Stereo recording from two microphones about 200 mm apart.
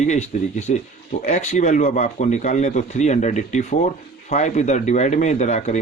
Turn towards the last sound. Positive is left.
turn(degrees=35)  # may be behind; listen again after turning